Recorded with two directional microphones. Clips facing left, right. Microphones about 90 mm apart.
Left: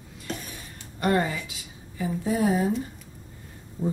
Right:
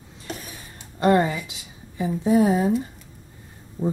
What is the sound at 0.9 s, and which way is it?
A woman's voice, 25° right (ahead or behind).